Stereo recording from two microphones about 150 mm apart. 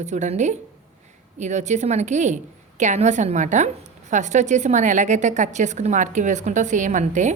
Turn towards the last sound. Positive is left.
turn(degrees=-55)  # may be behind; listen again after turning